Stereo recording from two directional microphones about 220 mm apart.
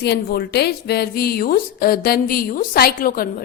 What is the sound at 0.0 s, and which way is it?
A woman's voice, 45° left (ahead or behind).